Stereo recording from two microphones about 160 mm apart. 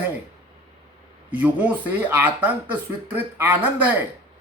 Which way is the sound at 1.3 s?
10° right (ahead or behind).